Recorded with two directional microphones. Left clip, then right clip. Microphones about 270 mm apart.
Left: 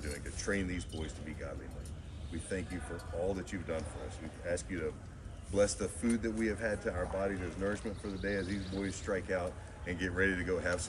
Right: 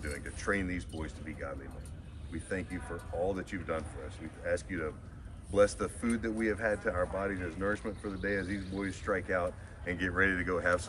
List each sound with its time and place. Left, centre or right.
0.0 s speech: centre
3.3 s speech: centre